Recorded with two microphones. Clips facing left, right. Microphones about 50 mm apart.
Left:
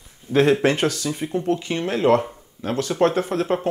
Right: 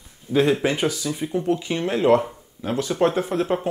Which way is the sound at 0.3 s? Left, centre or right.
Left.